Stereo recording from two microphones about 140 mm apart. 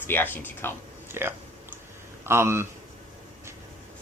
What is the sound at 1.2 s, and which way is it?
Speech, 15° right (ahead or behind).